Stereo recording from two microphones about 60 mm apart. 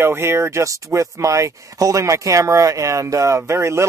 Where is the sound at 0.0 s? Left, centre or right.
Right.